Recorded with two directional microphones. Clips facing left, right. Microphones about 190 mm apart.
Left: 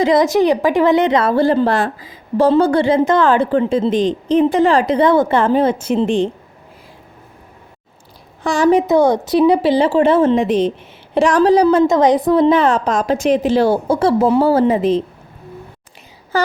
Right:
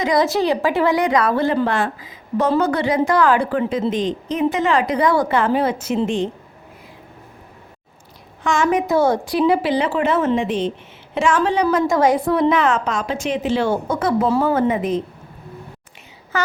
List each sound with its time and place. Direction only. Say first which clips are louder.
0.0 s a woman's voice: left 5 dB; 20° left (ahead or behind)
8.4 s a woman's voice: left 5 dB; 35° left (ahead or behind)
8.9 s a woman's voice: left 4 dB; 15° left (ahead or behind)
9.5 s a woman's voice: left 5 dB; 30° left (ahead or behind)
16.3 s speech: left 5 dB; 35° left (ahead or behind)